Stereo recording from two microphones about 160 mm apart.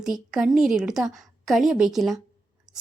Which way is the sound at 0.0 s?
5° right (ahead or behind).